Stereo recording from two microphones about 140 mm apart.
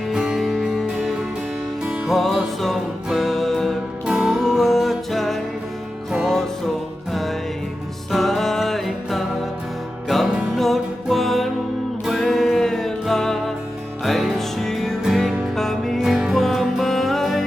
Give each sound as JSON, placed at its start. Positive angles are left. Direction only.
{"t": 0.1, "sound": "music", "side_deg": -5}